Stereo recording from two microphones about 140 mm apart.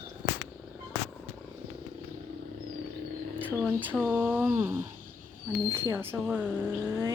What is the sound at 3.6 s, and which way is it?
Speech, 10° left (ahead or behind).